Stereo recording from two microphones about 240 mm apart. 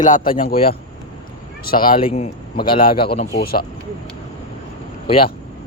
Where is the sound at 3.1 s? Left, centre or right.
Left.